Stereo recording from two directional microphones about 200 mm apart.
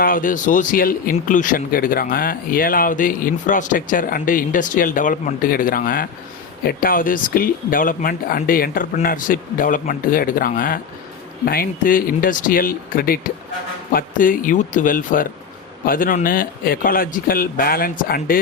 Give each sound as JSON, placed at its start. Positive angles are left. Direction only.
{"t": 0.0, "sound": "speech", "side_deg": 40}